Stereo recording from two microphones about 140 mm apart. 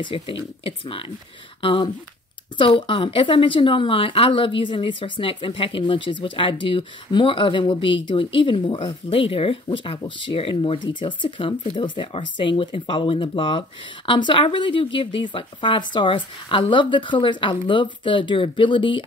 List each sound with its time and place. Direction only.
0.0 s speech: 40° left (ahead or behind)